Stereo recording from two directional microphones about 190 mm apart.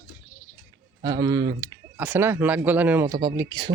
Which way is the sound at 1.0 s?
20° right (ahead or behind).